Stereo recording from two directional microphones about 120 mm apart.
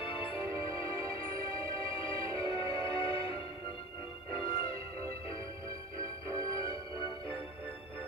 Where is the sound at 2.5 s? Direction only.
45° left (ahead or behind).